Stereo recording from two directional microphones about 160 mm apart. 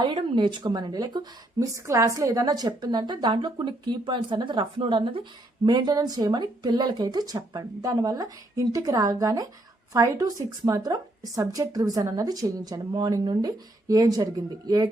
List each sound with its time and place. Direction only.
0.0 s speech: 30° right (ahead or behind)